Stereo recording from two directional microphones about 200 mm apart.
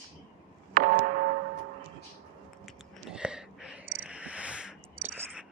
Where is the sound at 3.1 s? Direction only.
5° right (ahead or behind).